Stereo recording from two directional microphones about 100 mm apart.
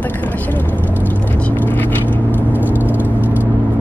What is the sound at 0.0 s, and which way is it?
Vehicle, 15° left (ahead or behind).